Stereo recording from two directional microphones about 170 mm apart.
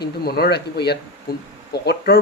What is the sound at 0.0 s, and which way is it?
Speech, 65° left (ahead or behind).